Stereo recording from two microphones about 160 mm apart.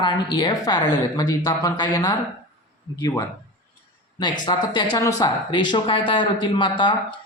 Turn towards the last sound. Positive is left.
turn(degrees=30)  # may be behind; listen again after turning